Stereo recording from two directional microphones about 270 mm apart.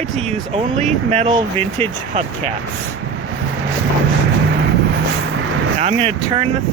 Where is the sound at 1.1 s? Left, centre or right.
Right.